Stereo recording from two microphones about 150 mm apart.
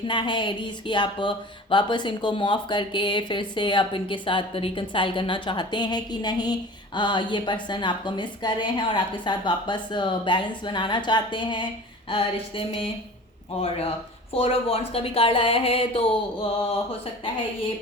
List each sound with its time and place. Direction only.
0.1 s speech: 30° left (ahead or behind)